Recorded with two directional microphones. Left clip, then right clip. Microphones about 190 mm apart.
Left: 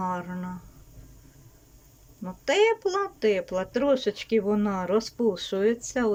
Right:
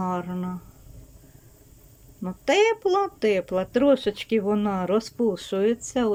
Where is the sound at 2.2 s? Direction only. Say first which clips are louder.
Right 2 dB; 15° right (ahead or behind).